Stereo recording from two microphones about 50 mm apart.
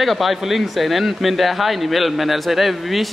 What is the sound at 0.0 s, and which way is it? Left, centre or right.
Speech, centre.